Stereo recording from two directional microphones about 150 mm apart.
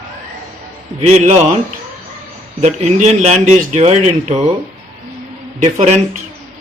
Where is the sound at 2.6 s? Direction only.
50° right (ahead or behind).